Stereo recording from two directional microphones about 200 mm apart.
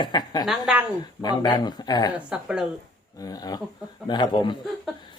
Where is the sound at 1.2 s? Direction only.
20° left (ahead or behind).